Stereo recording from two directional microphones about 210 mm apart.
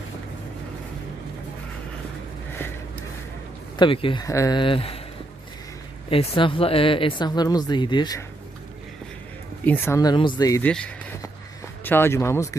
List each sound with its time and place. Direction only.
3.8 s speech: 25° left (ahead or behind)
6.1 s speech: 25° left (ahead or behind)
9.6 s speech: 10° left (ahead or behind)
10.7 s speech: 5° left (ahead or behind)